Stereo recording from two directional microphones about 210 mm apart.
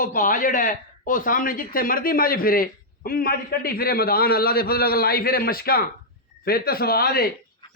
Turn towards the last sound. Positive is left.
turn(degrees=45)  # may be behind; listen again after turning